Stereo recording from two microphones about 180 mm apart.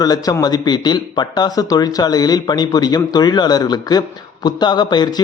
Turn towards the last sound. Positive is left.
turn(degrees=25)  # may be behind; listen again after turning